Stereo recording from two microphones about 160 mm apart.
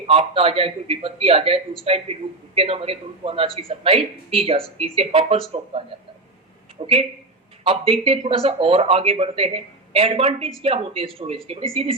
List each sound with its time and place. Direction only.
0.0 s speech: 35° right (ahead or behind)